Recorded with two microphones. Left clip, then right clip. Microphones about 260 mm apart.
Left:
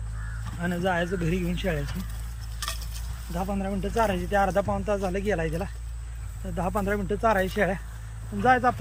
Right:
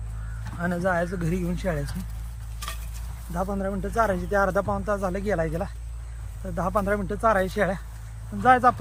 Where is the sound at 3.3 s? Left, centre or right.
Right.